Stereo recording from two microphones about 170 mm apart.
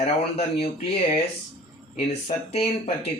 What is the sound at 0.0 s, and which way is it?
Speech, 35° left (ahead or behind).